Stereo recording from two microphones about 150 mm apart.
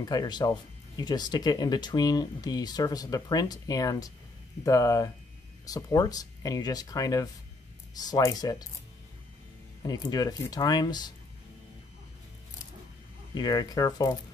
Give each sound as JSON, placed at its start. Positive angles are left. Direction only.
{"t": 0.0, "sound": "speech", "side_deg": 30}
{"t": 9.8, "sound": "speech", "side_deg": 25}
{"t": 13.3, "sound": "speech", "side_deg": 25}